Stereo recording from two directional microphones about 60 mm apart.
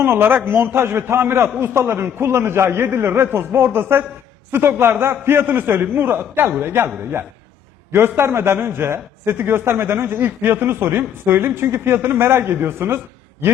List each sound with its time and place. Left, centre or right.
0.0 s a man's voice: right